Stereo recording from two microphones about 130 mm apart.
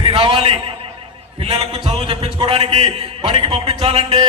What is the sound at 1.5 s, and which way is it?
A man's voice, 45° right (ahead or behind).